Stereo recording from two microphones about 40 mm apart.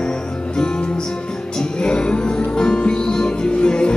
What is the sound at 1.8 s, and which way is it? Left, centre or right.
Music, left.